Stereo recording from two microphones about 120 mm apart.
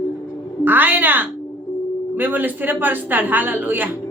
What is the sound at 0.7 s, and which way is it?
A woman's voice, 15° right (ahead or behind).